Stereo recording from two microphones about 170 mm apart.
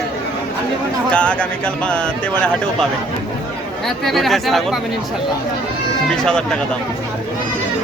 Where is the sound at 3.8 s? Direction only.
Centre (ahead or behind).